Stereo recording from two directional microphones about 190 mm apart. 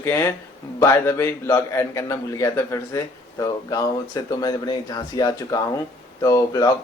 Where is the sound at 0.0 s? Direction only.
15° left (ahead or behind).